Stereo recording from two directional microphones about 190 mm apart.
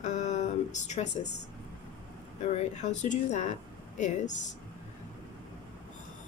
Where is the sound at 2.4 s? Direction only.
35° left (ahead or behind).